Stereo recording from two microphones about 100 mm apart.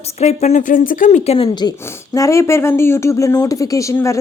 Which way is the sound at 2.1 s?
30° left (ahead or behind).